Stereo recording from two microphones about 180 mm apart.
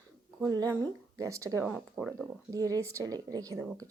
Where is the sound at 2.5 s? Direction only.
20° right (ahead or behind).